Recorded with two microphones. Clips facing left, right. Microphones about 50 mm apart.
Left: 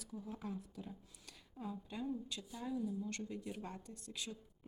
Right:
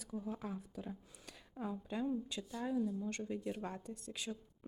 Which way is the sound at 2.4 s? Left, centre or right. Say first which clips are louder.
Right 5 dB; centre.